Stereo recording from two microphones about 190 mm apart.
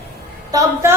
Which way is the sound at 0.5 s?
15° right (ahead or behind).